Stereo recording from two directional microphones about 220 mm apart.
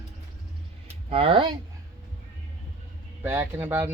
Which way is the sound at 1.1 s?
25° right (ahead or behind).